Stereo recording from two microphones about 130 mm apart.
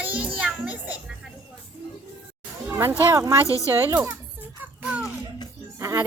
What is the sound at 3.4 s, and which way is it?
Speech, 25° left (ahead or behind).